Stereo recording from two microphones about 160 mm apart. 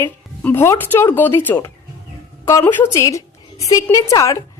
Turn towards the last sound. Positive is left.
turn(degrees=20)  # may be behind; listen again after turning